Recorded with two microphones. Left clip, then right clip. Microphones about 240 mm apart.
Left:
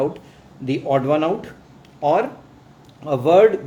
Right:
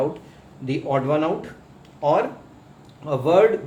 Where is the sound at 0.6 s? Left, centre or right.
Left.